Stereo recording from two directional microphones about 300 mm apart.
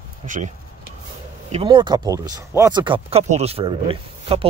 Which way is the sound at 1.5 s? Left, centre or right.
Centre.